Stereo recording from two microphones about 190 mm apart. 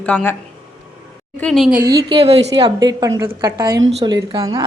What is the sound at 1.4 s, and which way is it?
Speech, centre (ahead or behind).